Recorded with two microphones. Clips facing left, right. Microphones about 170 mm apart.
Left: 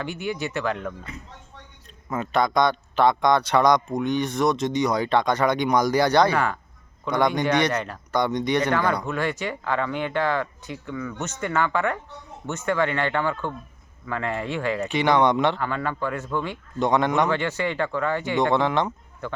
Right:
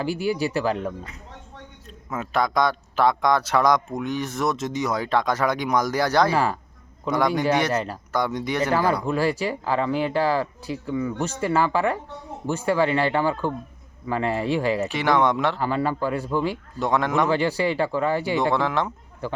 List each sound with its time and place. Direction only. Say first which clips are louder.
0.0 s speech: right 5 dB; 35° right (ahead or behind)
2.0 s a man's voice: left 1 dB; 5° right (ahead or behind)
6.3 s speech: right 2 dB; 35° right (ahead or behind)
7.1 s a man's voice: even; 5° right (ahead or behind)
7.7 s a man's voice: right 2 dB; 25° right (ahead or behind)
8.1 s a man's voice: left 3 dB; 5° right (ahead or behind)
9.0 s speech: right 4 dB; 35° right (ahead or behind)
14.9 s a man's voice: left 4 dB; centre (ahead or behind)
15.5 s speech: right 3 dB; 35° right (ahead or behind)
16.8 s a man's voice: left 1 dB; centre (ahead or behind)
17.3 s speech: right 3 dB; 35° right (ahead or behind)
18.3 s a man's voice: left 1 dB; centre (ahead or behind)